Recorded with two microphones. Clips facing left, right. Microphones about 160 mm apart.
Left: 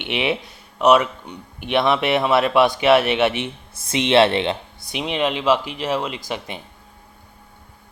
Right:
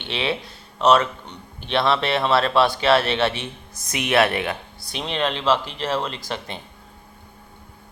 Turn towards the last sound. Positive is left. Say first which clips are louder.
# left 2 dB
turn(degrees=10)  # may be behind; listen again after turning